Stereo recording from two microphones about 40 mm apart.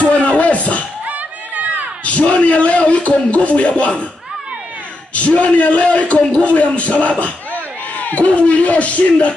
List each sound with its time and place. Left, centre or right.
0.0 s music: left
1.0 s a sound: right
2.0 s a man's voice: left
5.1 s a man's voice: left